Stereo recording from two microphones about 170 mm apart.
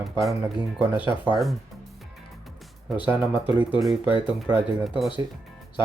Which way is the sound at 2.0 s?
Centre (ahead or behind).